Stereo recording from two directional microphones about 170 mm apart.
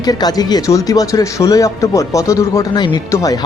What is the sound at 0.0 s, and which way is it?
Speech, 25° left (ahead or behind).